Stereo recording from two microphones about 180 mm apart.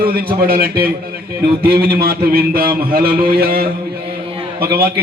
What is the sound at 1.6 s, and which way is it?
A man's voice, 60° right (ahead or behind).